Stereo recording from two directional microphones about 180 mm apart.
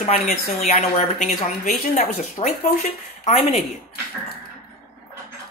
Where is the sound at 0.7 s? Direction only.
45° left (ahead or behind).